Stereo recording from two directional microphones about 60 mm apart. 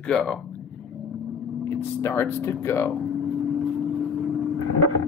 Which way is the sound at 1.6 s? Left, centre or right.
Left.